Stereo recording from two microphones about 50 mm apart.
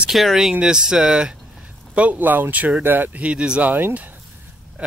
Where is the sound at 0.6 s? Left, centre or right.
Centre.